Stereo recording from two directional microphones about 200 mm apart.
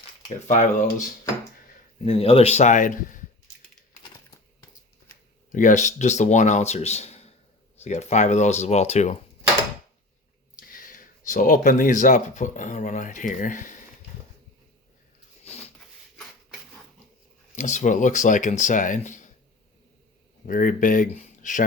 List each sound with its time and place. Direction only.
0.4 s speech: 40° left (ahead or behind)
5.5 s speech: 40° left (ahead or behind)
10.6 s speech: 45° left (ahead or behind)
17.5 s speech: 35° left (ahead or behind)
20.5 s speech: 40° left (ahead or behind)